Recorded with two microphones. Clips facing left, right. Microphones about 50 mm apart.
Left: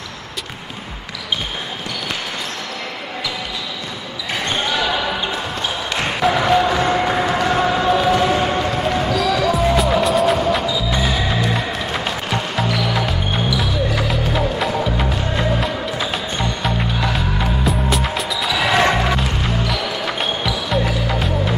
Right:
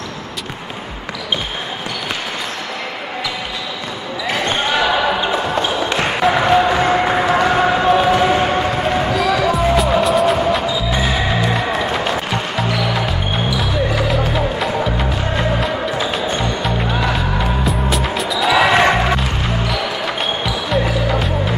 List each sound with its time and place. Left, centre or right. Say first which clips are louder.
4.5 s basketball bounce: right 3 dB; centre
9.5 s music: right 1 dB; centre
10.6 s music: right 2 dB; centre
11.7 s music: right 5 dB; centre
18.7 s basketball bounce: right 3 dB; centre
19.1 s music: right 1 dB; centre